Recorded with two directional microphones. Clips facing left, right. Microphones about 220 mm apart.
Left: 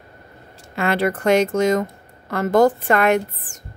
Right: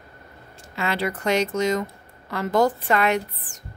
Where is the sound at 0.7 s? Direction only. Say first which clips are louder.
Left 6 dB; 55° left (ahead or behind).